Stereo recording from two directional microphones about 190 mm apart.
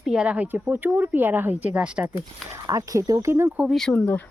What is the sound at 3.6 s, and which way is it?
Speech, centre (ahead or behind).